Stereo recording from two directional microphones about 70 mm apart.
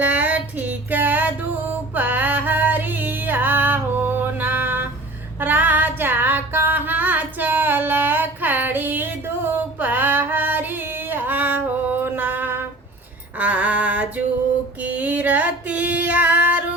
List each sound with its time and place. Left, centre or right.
0.0 s music: right
5.4 s female singing: right
13.4 s a sound: right
14.8 s female singing: right